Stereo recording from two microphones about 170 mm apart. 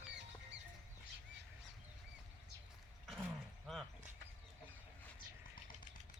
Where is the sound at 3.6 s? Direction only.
Centre (ahead or behind).